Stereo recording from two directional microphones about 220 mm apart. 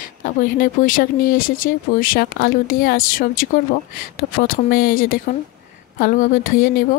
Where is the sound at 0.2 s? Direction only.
35° left (ahead or behind).